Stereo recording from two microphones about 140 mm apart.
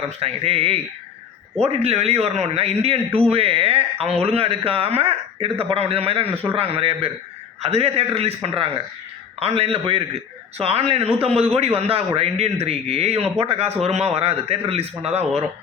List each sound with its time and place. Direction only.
0.2 s a man's voice: 45° right (ahead or behind)